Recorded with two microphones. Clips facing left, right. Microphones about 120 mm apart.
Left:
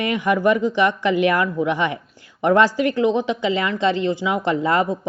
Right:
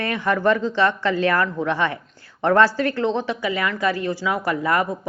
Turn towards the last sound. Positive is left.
turn(degrees=25)  # may be behind; listen again after turning